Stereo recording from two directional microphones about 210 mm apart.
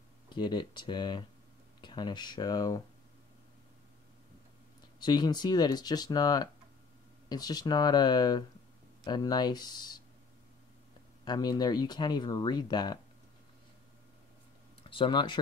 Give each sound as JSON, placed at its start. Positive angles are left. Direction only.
{"t": 0.3, "sound": "speech", "side_deg": 20}
{"t": 5.0, "sound": "speech", "side_deg": 20}
{"t": 11.2, "sound": "speech", "side_deg": 20}
{"t": 14.8, "sound": "speech", "side_deg": 25}